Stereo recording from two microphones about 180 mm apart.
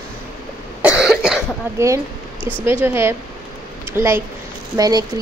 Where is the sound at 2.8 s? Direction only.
10° right (ahead or behind).